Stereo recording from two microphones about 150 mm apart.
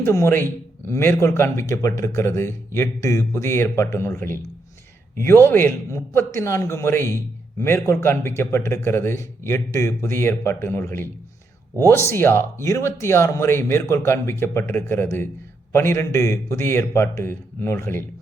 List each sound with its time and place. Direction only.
0.0 s a man's voice: 20° left (ahead or behind)